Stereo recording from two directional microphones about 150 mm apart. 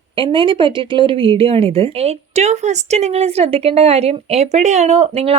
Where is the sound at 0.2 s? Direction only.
35° right (ahead or behind).